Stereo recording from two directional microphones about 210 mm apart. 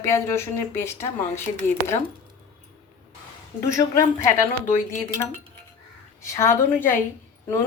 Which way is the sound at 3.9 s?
15° left (ahead or behind).